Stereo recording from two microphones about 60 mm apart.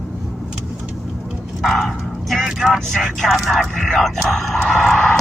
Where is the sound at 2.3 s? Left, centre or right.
Centre.